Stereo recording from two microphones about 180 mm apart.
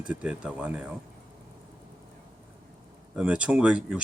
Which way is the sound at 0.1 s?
5° right (ahead or behind).